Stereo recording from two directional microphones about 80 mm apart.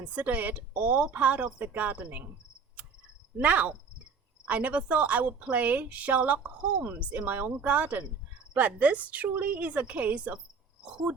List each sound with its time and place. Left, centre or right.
0.0 s speech: centre
3.3 s speech: centre